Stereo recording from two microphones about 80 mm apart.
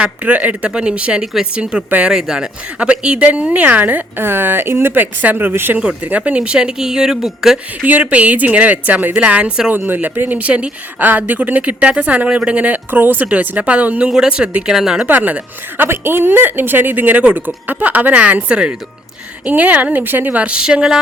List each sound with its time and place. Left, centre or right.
0.0 s speech: centre
7.9 s speech: centre
15.0 s speech: right